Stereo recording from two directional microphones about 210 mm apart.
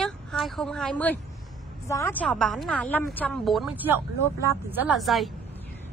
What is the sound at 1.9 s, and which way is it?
A woman's voice, 10° left (ahead or behind).